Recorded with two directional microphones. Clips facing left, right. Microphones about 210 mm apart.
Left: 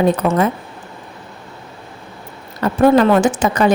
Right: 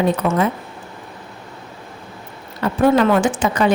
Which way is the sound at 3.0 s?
40° left (ahead or behind).